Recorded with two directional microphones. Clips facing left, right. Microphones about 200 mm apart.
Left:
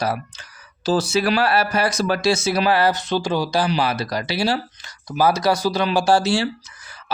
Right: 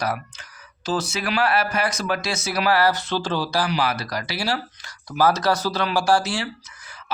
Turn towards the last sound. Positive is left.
turn(degrees=30)  # may be behind; listen again after turning